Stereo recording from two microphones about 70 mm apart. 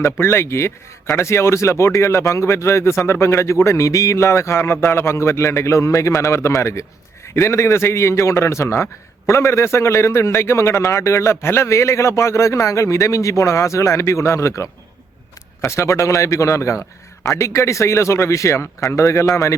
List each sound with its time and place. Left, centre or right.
0.0 s a man's voice: left